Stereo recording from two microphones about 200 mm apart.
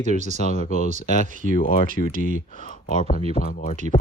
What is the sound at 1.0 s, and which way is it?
Speech, 40° left (ahead or behind).